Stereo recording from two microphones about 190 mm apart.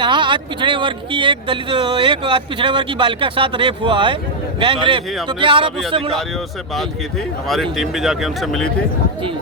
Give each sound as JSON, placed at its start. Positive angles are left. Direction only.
{"t": 0.0, "sound": "speech", "side_deg": -25}
{"t": 7.4, "sound": "speech", "side_deg": 0}